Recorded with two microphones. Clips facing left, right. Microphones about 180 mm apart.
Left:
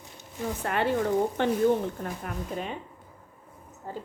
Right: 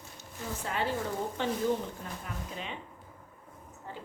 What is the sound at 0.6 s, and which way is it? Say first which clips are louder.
A woman's voice: left 7 dB; 60° left (ahead or behind).